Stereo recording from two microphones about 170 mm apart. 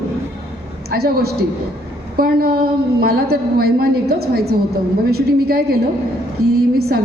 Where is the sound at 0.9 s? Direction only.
65° right (ahead or behind).